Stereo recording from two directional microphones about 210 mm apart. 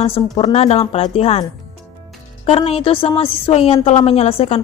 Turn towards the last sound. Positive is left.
turn(degrees=30)  # may be behind; listen again after turning